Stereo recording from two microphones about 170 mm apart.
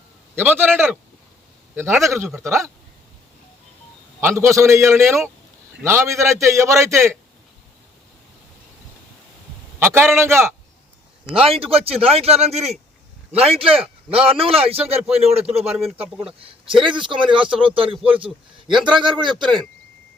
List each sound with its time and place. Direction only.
0.3 s a man's voice: 10° right (ahead or behind)
4.2 s a man's voice: 15° right (ahead or behind)
9.8 s a man's voice: 15° right (ahead or behind)
11.4 s speech: 35° right (ahead or behind)
19.4 s speech: centre (ahead or behind)